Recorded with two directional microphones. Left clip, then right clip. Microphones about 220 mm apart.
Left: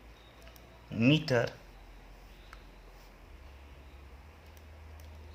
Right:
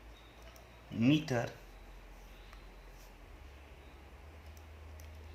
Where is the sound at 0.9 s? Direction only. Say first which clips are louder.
Left 4 dB; 25° left (ahead or behind).